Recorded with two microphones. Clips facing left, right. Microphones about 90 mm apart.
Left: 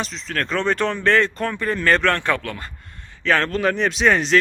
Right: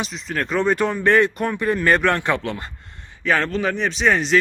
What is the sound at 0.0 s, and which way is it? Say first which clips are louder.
Speech: even; 10° right (ahead or behind).